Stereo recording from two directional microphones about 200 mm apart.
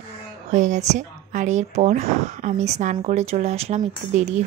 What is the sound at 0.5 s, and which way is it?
Speech, 35° right (ahead or behind).